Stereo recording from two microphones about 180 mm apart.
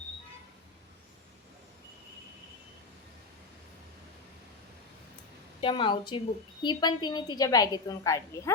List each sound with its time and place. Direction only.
5.5 s a woman's voice: 25° left (ahead or behind)